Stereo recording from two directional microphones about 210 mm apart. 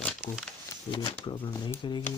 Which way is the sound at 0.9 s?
20° left (ahead or behind).